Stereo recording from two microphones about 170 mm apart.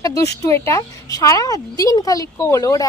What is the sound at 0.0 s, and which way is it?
A woman's voice, 20° left (ahead or behind).